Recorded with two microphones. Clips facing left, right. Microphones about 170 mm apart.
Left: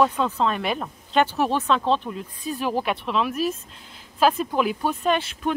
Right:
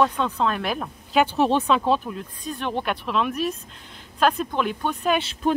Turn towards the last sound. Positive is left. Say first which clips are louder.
# right 3 dB
turn(degrees=-35)  # may be behind; listen again after turning